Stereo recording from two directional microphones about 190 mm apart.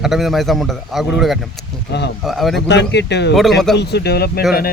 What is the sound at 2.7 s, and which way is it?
Speech, 65° left (ahead or behind).